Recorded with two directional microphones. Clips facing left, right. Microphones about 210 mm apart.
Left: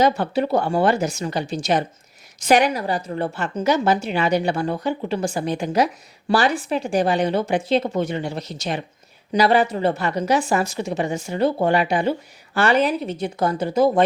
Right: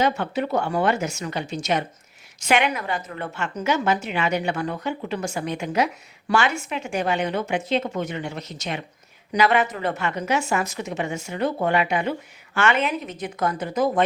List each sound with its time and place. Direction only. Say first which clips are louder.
0.0 s speech: left 4 dB; 35° left (ahead or behind)